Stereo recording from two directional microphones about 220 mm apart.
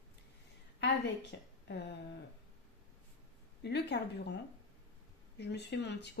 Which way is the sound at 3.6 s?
50° left (ahead or behind).